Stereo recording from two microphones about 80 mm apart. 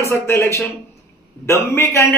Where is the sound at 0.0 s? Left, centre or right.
Left.